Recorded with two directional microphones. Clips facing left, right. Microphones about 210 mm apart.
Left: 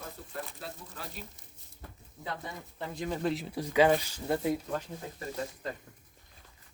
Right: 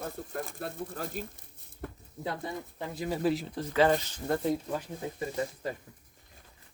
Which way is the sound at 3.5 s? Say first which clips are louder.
Left 3 dB; 10° left (ahead or behind).